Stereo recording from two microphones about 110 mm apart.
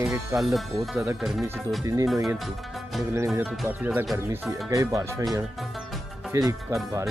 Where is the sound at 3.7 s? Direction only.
15° right (ahead or behind).